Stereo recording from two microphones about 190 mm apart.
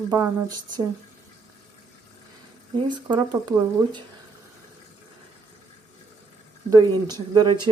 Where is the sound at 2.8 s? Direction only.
25° right (ahead or behind).